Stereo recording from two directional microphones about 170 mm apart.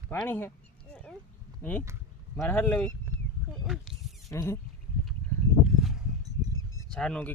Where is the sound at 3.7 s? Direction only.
Centre (ahead or behind).